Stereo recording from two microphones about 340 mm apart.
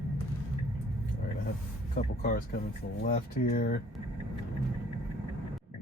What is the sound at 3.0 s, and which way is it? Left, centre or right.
Speech, left.